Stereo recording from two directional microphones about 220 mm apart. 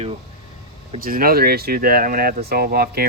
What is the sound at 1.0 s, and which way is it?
Speech, 40° right (ahead or behind).